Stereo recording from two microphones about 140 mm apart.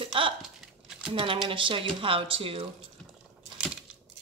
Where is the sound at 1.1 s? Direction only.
40° right (ahead or behind).